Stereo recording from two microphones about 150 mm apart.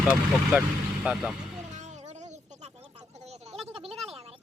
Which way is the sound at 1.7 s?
50° right (ahead or behind).